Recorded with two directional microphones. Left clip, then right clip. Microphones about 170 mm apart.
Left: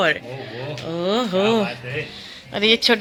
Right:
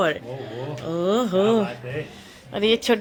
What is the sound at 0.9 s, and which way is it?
Speech, 15° right (ahead or behind).